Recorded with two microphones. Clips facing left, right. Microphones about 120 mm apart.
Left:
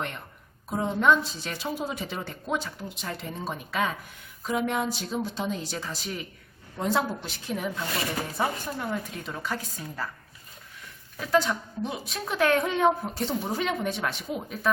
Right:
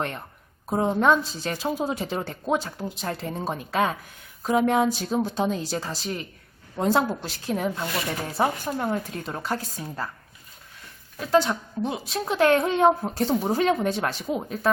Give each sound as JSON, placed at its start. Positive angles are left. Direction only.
{"t": 0.7, "sound": "a woman's voice", "side_deg": -40}
{"t": 11.2, "sound": "a woman's voice", "side_deg": -30}